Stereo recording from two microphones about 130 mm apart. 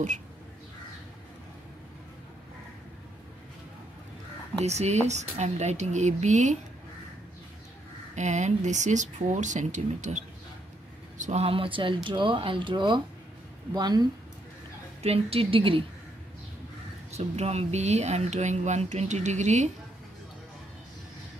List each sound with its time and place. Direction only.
4.6 s speech: 60° right (ahead or behind)
8.2 s speech: 65° right (ahead or behind)
11.4 s speech: 45° right (ahead or behind)
15.0 s a woman's voice: 50° right (ahead or behind)
17.1 s speech: 55° right (ahead or behind)